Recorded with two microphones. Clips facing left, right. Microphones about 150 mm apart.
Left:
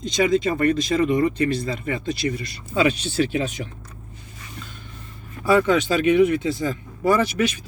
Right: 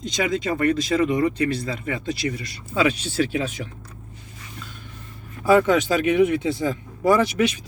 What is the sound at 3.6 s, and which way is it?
Speech, 20° left (ahead or behind).